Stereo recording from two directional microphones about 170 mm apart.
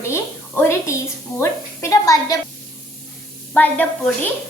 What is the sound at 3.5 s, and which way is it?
Speech, 10° left (ahead or behind).